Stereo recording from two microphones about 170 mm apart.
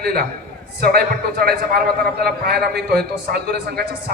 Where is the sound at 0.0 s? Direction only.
65° right (ahead or behind).